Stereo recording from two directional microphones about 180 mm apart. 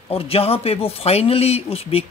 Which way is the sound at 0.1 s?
30° left (ahead or behind).